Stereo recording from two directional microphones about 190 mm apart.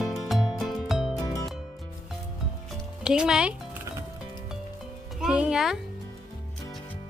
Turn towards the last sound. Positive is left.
turn(degrees=0)  # may be behind; listen again after turning